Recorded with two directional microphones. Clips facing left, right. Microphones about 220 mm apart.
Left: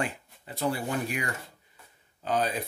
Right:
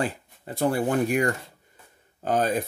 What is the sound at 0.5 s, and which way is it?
Speech, 50° right (ahead or behind).